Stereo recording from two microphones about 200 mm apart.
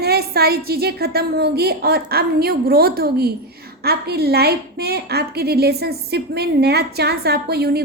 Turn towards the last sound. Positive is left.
turn(degrees=-50)  # may be behind; listen again after turning